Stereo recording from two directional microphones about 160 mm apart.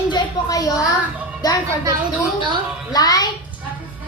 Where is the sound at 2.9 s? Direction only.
25° left (ahead or behind).